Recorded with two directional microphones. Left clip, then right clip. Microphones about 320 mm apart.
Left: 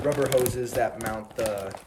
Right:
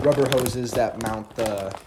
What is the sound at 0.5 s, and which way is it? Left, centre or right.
Speech, centre.